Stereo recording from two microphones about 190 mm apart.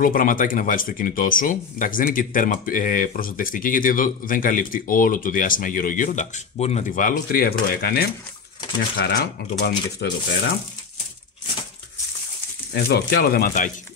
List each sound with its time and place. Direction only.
0.0 s speech: 45° left (ahead or behind); by 10.1 s 65° left (ahead or behind)
12.8 s speech: 55° left (ahead or behind)